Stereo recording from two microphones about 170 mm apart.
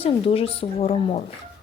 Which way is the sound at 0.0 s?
35° left (ahead or behind).